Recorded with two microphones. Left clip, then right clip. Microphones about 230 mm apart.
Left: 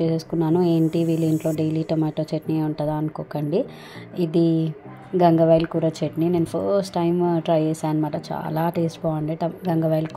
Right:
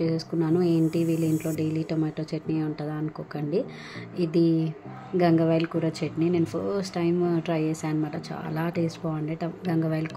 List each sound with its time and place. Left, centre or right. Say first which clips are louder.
0.0 s speech: left 4 dB; centre